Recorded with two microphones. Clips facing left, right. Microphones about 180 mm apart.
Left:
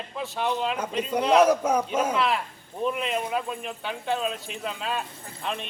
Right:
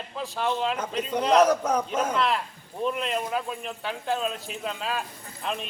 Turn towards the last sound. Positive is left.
turn(degrees=0)  # may be behind; listen again after turning